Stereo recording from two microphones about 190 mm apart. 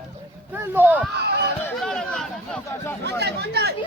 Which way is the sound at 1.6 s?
5° left (ahead or behind).